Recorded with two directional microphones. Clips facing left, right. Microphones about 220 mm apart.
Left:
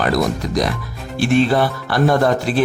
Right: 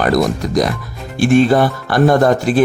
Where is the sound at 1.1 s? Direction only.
50° right (ahead or behind).